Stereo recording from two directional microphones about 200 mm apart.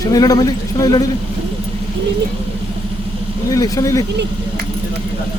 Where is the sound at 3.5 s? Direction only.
15° left (ahead or behind).